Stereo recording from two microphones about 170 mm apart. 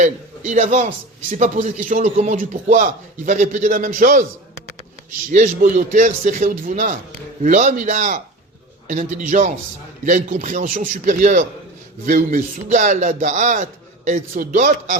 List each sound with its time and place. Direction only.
0.0 s a man's voice: 45° right (ahead or behind)
5.3 s a man's voice: 50° right (ahead or behind)